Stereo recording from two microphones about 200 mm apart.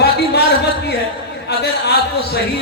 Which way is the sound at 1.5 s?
55° left (ahead or behind).